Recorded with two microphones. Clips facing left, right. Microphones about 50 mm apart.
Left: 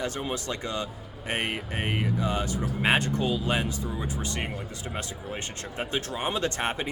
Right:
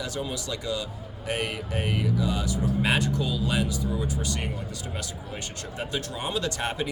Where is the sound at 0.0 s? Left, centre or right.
Left.